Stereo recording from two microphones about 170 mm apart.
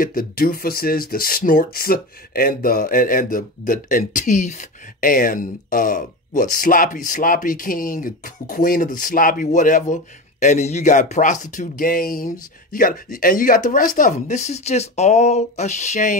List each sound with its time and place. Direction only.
0.0 s speech: 55° left (ahead or behind)